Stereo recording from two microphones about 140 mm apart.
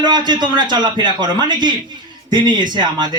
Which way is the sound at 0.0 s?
30° right (ahead or behind).